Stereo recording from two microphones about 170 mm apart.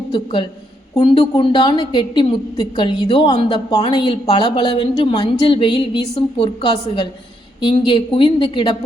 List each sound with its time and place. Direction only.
0.1 s a woman's voice: 25° left (ahead or behind)